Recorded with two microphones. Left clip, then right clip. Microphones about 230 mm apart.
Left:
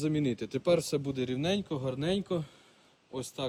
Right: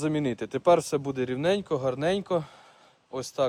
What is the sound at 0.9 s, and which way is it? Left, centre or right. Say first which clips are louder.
Speech: right 4 dB; centre.